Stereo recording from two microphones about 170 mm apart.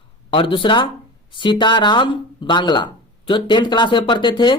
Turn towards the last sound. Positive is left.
turn(degrees=25)  # may be behind; listen again after turning